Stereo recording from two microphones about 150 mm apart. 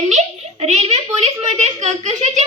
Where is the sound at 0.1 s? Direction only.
50° right (ahead or behind).